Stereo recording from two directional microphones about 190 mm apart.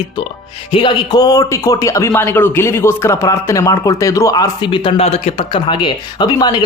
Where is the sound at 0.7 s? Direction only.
25° left (ahead or behind).